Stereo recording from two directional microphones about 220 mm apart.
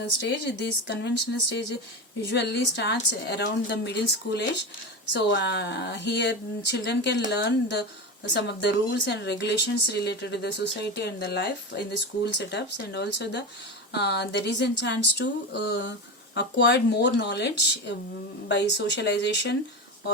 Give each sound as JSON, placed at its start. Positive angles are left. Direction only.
{"t": 0.0, "sound": "speech", "side_deg": 50}